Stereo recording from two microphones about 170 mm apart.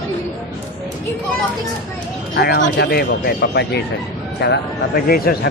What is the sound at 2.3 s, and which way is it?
A man's voice, 80° left.